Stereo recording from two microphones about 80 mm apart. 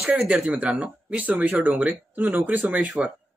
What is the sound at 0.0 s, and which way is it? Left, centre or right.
Speech, centre.